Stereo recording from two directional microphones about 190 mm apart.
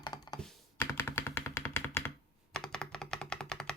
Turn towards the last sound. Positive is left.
turn(degrees=5)  # may be behind; listen again after turning